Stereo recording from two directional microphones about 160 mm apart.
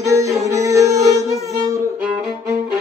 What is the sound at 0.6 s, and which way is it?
Music, 20° right (ahead or behind).